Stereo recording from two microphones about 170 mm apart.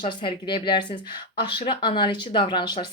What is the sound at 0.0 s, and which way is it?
Speech, 30° left (ahead or behind).